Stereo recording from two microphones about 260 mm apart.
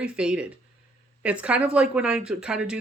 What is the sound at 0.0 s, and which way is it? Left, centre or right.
Speech, centre.